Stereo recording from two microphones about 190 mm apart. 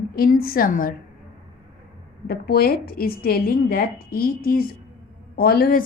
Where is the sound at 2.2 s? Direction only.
55° left (ahead or behind).